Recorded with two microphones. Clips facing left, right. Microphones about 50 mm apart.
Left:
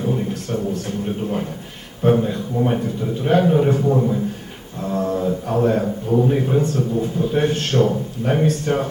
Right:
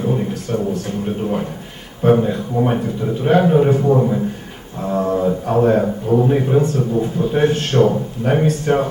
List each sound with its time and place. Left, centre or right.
0.0 s a man's voice: centre